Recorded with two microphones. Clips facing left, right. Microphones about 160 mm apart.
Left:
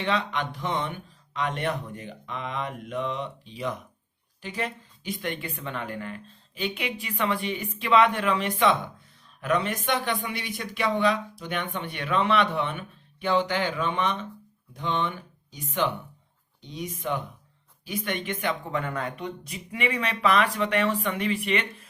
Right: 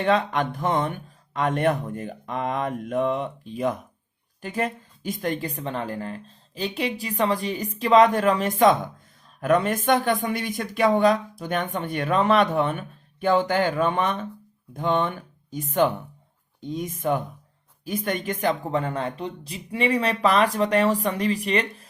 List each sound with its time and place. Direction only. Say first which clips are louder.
0.0 s a woman's voice: right 6 dB; 45° right (ahead or behind)